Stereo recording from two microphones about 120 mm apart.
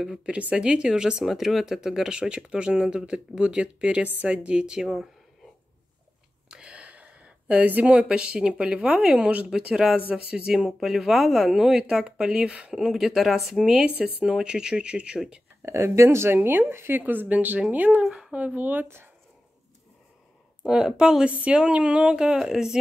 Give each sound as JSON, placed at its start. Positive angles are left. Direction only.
{"t": 0.0, "sound": "speech", "side_deg": -5}
{"t": 6.5, "sound": "speech", "side_deg": -10}
{"t": 15.6, "sound": "speech", "side_deg": -25}
{"t": 20.6, "sound": "speech", "side_deg": -5}